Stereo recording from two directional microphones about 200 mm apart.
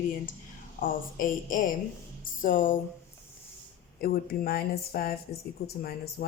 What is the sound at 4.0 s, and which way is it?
A woman's voice, 45° left (ahead or behind).